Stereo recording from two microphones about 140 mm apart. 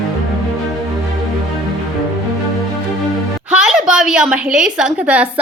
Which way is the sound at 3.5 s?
5° right (ahead or behind).